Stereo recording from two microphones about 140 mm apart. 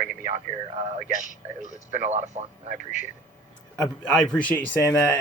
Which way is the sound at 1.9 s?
55° right (ahead or behind).